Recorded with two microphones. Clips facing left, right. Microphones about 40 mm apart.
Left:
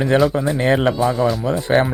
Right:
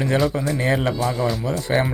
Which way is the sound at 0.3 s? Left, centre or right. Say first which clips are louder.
Left 4 dB; left.